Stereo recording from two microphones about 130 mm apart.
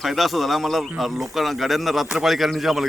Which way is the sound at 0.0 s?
Centre (ahead or behind).